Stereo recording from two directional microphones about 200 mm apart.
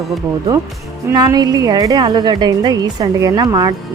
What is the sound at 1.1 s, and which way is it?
A woman's voice, 20° right (ahead or behind).